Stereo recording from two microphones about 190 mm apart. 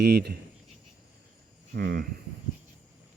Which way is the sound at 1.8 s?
60° right (ahead or behind).